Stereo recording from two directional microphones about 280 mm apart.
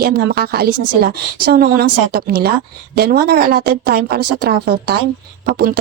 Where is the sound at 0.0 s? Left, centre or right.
Right.